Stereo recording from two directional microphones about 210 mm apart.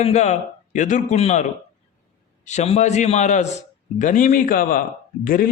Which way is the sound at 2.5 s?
30° left (ahead or behind).